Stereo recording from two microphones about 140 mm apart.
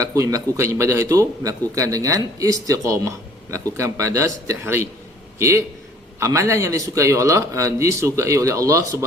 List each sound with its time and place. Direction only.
0.0 s a man's voice: 25° right (ahead or behind)